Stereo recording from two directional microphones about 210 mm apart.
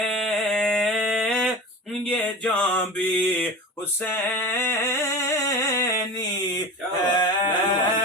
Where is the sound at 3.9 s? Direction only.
10° left (ahead or behind).